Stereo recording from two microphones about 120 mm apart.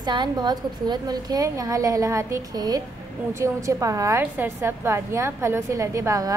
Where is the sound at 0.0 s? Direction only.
40° right (ahead or behind).